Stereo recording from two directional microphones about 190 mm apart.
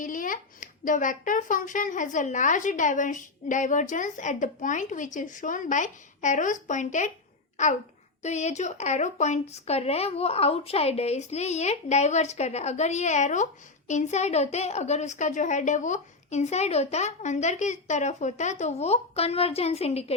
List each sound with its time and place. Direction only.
0.0 s a child's voice: 45° left (ahead or behind)